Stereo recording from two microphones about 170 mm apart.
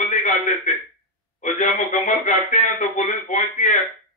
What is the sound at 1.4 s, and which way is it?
A man's voice, 45° left (ahead or behind).